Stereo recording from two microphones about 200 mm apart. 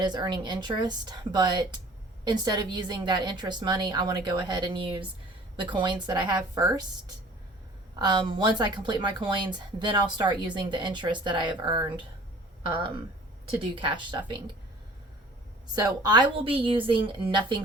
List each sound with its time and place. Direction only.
0.0 s speech: 20° right (ahead or behind)
7.9 s speech: 20° right (ahead or behind)
13.6 s speech: 25° right (ahead or behind)
15.7 s speech: 20° right (ahead or behind)